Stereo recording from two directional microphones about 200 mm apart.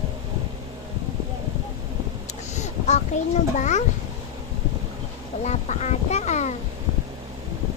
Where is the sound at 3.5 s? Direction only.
35° left (ahead or behind).